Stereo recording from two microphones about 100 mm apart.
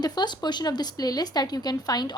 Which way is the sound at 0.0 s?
45° left (ahead or behind).